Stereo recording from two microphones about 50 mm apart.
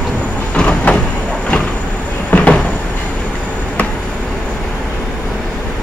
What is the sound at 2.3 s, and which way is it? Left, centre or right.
Cupboard open or close, left.